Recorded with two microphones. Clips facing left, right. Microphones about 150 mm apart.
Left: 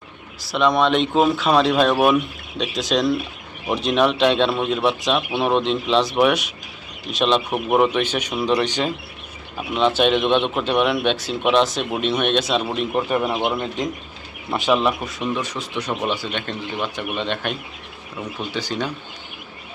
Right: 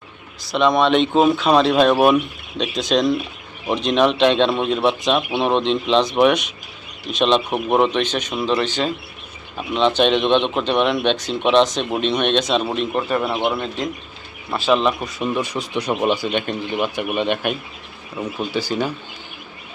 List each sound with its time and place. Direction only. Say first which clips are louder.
0.4 s a man's voice: right 2 dB; centre (ahead or behind)
15.2 s speech: right 4 dB; 10° right (ahead or behind)